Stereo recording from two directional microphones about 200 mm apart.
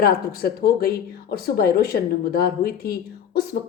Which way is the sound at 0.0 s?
50° left (ahead or behind).